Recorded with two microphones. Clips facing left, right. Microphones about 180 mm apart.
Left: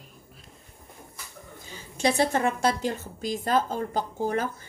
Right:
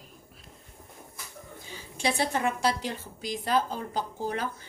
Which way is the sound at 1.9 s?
45° left (ahead or behind).